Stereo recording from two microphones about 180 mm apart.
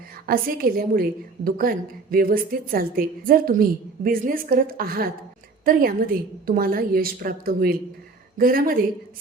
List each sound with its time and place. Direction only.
0.3 s a woman's voice: 55° right (ahead or behind)